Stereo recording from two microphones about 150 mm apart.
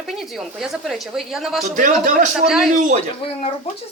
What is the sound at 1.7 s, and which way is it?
Speech, 60° right (ahead or behind).